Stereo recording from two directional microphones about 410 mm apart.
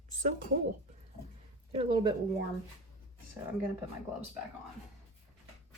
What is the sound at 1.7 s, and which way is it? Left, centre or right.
Speech, centre.